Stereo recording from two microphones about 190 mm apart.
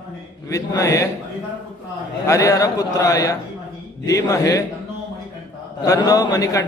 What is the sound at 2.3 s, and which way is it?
A man's voice, 20° left (ahead or behind).